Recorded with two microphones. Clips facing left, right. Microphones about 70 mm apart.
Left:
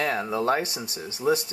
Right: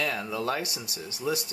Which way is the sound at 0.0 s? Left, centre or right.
Left.